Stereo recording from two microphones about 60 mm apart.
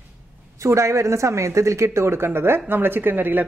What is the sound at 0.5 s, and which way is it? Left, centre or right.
Speech, right.